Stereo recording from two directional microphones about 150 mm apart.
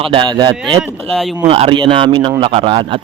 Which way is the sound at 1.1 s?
Centre (ahead or behind).